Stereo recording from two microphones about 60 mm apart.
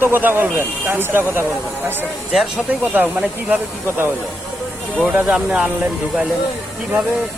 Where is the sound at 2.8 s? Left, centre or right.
Right.